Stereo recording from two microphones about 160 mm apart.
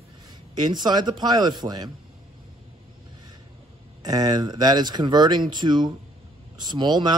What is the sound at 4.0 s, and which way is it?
Speech, 25° right (ahead or behind).